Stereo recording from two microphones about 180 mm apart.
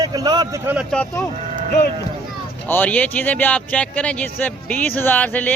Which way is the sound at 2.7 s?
10° left (ahead or behind).